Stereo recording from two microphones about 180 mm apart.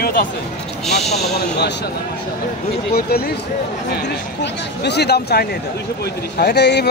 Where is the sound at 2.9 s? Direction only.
60° left (ahead or behind).